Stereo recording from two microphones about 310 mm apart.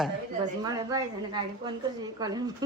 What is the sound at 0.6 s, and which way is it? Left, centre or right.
A woman's voice, centre.